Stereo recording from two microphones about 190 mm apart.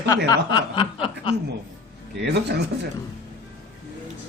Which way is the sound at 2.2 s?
60° right (ahead or behind).